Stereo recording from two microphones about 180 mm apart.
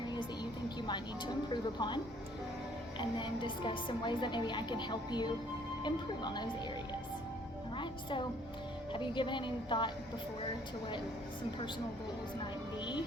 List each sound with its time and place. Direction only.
0.8 s a woman's voice: 25° left (ahead or behind)
3.0 s a woman's voice: 25° left (ahead or behind)
8.9 s a woman's voice: 25° left (ahead or behind)
12.8 s a woman's voice: 25° left (ahead or behind)